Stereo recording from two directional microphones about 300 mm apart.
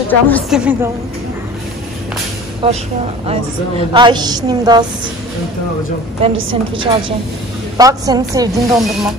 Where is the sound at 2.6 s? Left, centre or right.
Centre.